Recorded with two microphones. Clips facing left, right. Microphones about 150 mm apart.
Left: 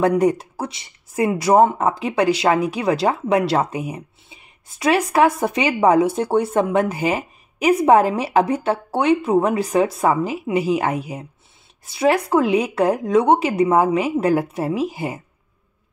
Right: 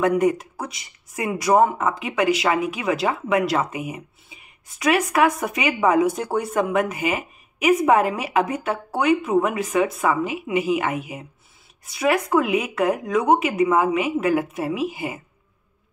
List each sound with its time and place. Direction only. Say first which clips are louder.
0.0 s speech: left 2 dB; 35° left (ahead or behind)